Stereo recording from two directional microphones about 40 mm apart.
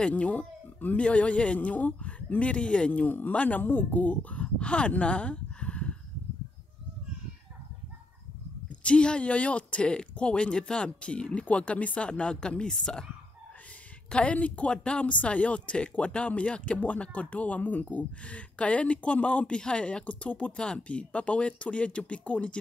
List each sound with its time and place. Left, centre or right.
0.1 s speech: left
0.9 s speech: left
2.9 s speech: left
8.8 s speech: left
14.1 s speech: left
16.7 s speech: left